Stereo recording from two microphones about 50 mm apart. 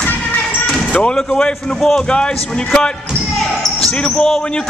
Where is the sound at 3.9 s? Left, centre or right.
Centre.